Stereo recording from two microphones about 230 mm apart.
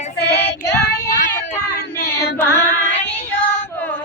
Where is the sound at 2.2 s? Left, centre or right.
Centre.